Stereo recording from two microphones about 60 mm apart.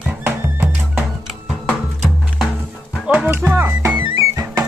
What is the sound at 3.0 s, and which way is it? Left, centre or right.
Music, centre.